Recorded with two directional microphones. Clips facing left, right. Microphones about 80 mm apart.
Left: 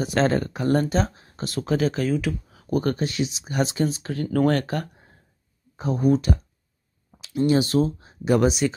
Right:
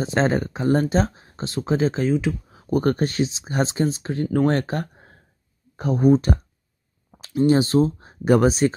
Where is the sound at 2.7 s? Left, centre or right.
Right.